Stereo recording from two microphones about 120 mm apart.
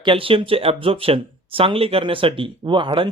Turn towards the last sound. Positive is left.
turn(degrees=-45)  # may be behind; listen again after turning